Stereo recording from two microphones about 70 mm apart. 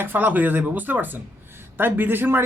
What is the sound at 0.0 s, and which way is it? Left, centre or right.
Speech, right.